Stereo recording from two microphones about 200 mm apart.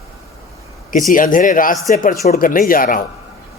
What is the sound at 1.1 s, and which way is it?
A man's voice, 40° left (ahead or behind).